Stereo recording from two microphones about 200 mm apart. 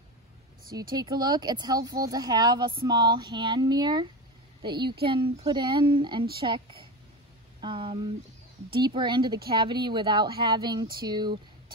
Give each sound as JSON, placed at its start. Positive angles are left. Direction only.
{"t": 0.9, "sound": "a woman's voice", "side_deg": -20}